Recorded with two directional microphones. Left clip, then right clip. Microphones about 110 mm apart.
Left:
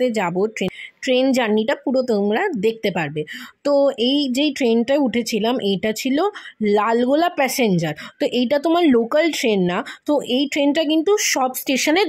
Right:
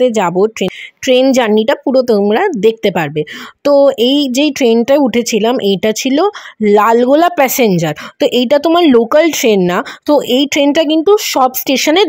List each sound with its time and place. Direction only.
0.0 s speech: 30° right (ahead or behind)
1.0 s speech: 35° right (ahead or behind)